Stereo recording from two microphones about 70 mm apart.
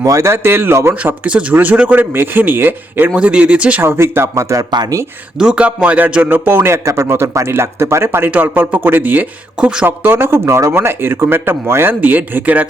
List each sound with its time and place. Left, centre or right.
0.0 s speech: right
0.9 s speech: right
3.2 s speech: centre
3.8 s speech: right
5.4 s music: centre
6.2 s speech: right
8.3 s speech: right
9.8 s speech: right